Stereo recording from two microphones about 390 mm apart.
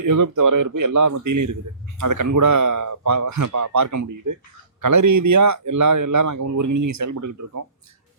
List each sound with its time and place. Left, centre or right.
0.0 s speech: right